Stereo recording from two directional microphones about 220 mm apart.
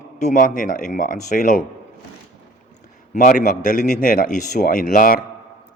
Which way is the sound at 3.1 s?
35° left (ahead or behind).